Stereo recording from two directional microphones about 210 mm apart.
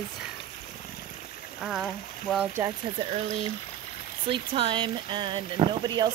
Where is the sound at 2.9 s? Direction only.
30° right (ahead or behind).